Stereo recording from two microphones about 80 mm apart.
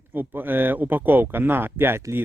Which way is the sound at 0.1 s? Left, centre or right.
Right.